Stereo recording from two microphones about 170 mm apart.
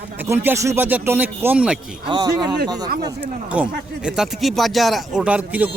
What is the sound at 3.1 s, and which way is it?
Speech, 10° right (ahead or behind).